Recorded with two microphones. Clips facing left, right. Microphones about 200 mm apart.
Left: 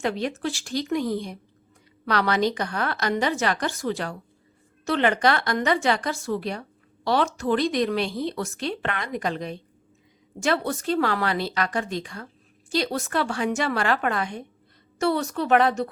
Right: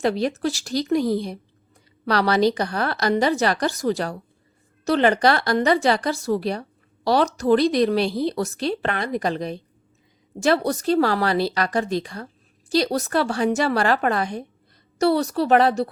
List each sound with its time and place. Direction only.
0.0 s a woman's voice: 35° right (ahead or behind)